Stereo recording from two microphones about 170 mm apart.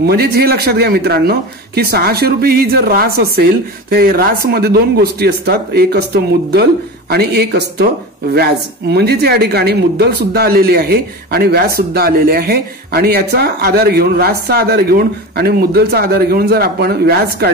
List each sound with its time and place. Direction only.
0.0 s speech: 65° right (ahead or behind)